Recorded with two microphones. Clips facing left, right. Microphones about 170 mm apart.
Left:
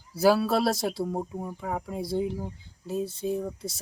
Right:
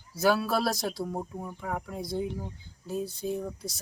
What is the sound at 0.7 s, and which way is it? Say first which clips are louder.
Speech: left 4 dB; 25° left (ahead or behind).